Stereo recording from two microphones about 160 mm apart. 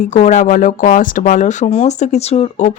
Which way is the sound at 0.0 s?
45° left (ahead or behind).